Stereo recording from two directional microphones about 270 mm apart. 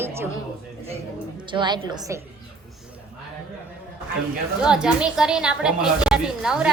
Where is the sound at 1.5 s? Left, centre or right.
Centre.